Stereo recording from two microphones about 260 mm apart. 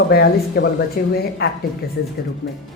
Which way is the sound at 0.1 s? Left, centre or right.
Left.